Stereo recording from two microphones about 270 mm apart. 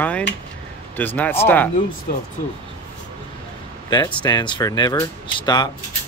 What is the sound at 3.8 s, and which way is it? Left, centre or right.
Speech, centre.